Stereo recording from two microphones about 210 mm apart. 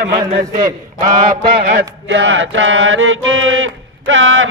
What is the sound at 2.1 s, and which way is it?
Mantra, 60° right (ahead or behind).